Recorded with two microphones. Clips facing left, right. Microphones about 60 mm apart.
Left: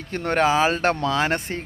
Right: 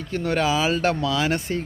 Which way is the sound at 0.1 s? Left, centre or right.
Left.